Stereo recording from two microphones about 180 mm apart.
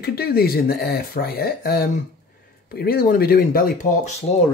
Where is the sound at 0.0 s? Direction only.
60° left (ahead or behind).